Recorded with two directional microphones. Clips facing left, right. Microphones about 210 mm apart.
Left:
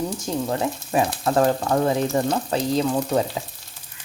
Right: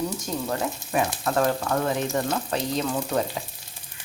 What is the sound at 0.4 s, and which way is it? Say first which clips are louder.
Speech: left 3 dB; 30° left (ahead or behind).